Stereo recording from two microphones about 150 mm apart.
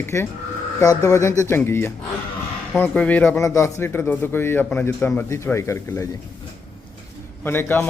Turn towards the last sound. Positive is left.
turn(degrees=15)  # may be behind; listen again after turning